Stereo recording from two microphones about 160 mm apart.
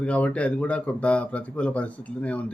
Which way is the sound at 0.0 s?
10° left (ahead or behind).